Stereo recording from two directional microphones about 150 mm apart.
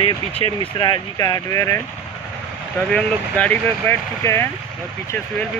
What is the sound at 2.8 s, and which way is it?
Speech, 10° left (ahead or behind).